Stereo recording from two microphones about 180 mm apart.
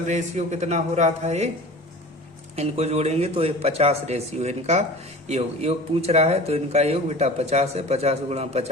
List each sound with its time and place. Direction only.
0.1 s speech: 40° right (ahead or behind)
2.6 s speech: 35° right (ahead or behind)